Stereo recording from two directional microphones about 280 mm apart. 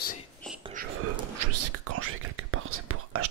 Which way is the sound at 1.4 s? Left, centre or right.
Right.